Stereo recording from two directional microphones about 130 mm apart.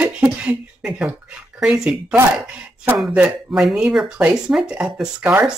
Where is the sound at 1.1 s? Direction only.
10° right (ahead or behind).